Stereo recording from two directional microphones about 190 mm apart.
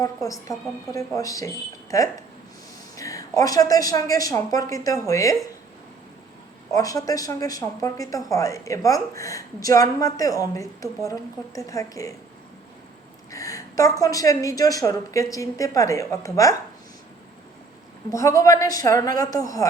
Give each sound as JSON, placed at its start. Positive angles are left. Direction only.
{"t": 0.0, "sound": "a woman's voice", "side_deg": 20}
{"t": 6.7, "sound": "a woman's voice", "side_deg": 20}
{"t": 13.3, "sound": "a woman's voice", "side_deg": 15}
{"t": 18.1, "sound": "a woman's voice", "side_deg": 15}